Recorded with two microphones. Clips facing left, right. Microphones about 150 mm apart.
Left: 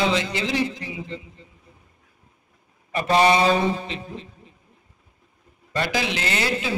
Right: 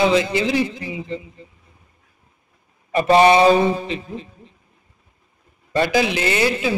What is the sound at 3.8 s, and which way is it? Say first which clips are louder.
Mantra: right 5 dB; 5° right (ahead or behind).